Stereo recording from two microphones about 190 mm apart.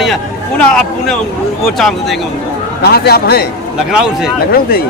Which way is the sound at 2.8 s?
55° left (ahead or behind).